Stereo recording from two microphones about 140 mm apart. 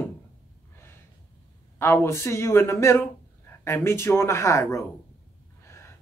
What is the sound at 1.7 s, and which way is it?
Speech, 20° left (ahead or behind).